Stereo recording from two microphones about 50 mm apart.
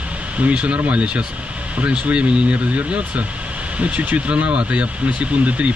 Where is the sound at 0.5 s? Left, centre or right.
Right.